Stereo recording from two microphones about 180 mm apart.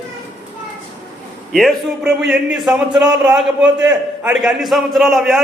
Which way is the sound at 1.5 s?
Centre (ahead or behind).